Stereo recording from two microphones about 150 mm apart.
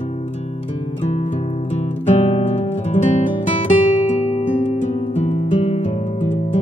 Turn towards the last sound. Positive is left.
turn(degrees=45)  # may be behind; listen again after turning